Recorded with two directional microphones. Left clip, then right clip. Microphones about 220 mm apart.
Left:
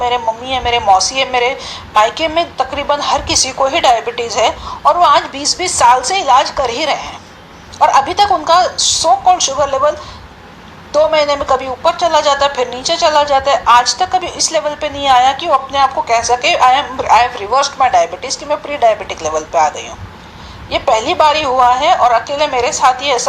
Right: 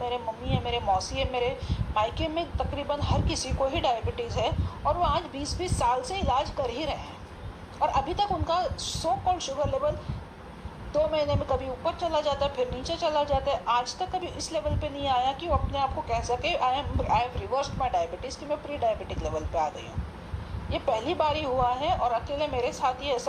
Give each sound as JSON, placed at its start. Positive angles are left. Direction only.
{"t": 0.0, "sound": "speech", "side_deg": 35}
{"t": 10.9, "sound": "speech", "side_deg": 35}